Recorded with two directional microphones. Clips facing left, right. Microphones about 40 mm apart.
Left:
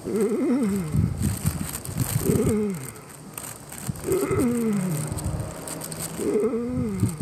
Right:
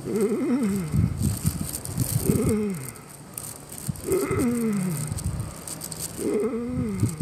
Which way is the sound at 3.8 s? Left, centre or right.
Left.